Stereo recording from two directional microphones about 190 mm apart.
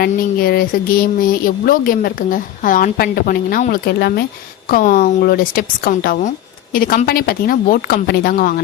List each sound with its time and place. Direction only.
0.1 s a woman's voice: 50° left (ahead or behind)